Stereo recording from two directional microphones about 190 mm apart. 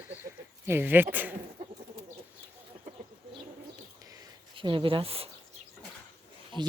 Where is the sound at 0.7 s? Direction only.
10° right (ahead or behind).